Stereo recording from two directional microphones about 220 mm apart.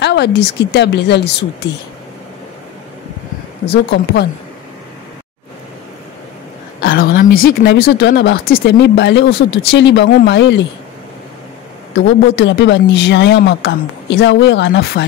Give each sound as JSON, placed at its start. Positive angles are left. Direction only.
{"t": 0.0, "sound": "a man's voice", "side_deg": 50}
{"t": 3.6, "sound": "a man's voice", "side_deg": 50}
{"t": 6.8, "sound": "a man's voice", "side_deg": 40}
{"t": 11.9, "sound": "a man's voice", "side_deg": 55}